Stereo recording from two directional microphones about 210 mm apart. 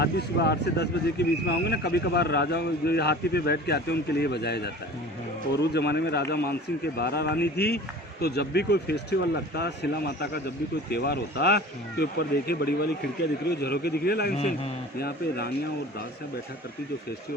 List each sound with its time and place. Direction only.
0.0 s speech: 55° left (ahead or behind)
5.7 s speech: 50° left (ahead or behind)
14.3 s a man's voice: 30° left (ahead or behind)
14.9 s speech: 50° left (ahead or behind)